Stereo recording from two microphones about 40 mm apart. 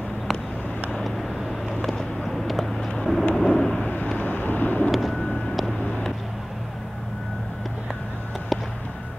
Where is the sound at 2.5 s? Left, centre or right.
Centre.